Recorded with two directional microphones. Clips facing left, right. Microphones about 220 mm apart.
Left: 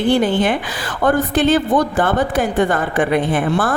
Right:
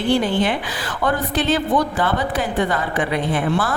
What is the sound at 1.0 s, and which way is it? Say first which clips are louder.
A woman's voice: left 6 dB; 50° left (ahead or behind).